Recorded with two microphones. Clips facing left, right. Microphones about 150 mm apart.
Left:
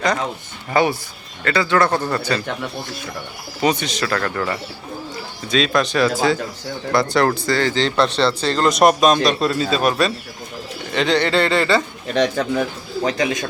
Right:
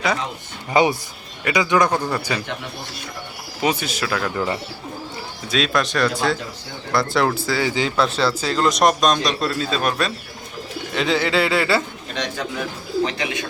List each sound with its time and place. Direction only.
0.7 s speech: 20° right (ahead or behind)
3.6 s speech: 5° right (ahead or behind)
5.5 s speech: centre (ahead or behind)
12.1 s a man's voice: 50° left (ahead or behind)